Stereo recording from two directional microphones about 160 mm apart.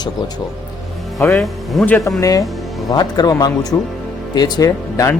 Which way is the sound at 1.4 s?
Centre (ahead or behind).